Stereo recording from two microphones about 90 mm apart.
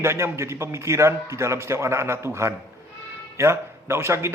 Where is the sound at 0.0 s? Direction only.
30° right (ahead or behind).